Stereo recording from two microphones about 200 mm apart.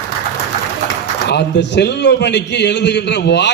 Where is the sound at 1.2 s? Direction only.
60° left (ahead or behind).